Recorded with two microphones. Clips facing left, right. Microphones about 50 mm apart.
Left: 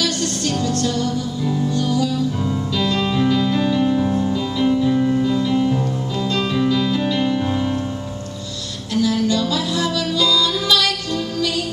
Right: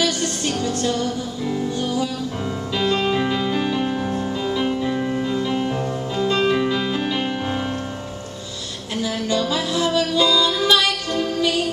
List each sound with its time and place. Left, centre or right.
0.0 s music: centre
8.9 s music: right